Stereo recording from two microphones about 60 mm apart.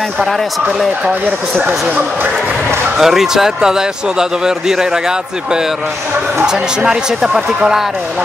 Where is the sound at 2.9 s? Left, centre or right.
Centre.